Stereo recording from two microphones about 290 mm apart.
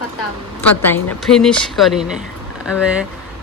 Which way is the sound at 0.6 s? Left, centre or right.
Centre.